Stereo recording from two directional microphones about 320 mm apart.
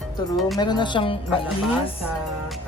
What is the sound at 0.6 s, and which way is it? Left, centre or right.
Music, centre.